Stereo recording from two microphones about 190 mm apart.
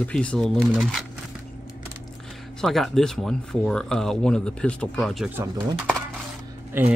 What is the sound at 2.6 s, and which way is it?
Speech, centre (ahead or behind).